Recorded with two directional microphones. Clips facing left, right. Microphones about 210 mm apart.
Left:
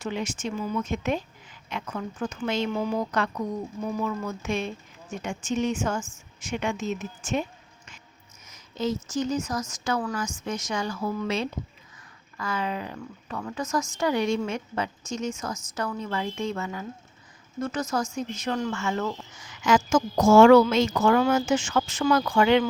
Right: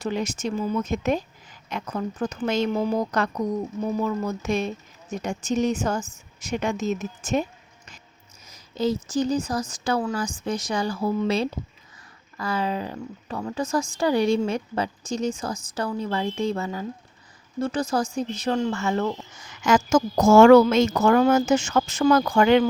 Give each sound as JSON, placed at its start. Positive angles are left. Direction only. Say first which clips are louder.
{"t": 0.0, "sound": "speech", "louder": "right 4 dB", "side_deg": -40}
{"t": 8.4, "sound": "a woman's voice", "louder": "right 4 dB", "side_deg": -35}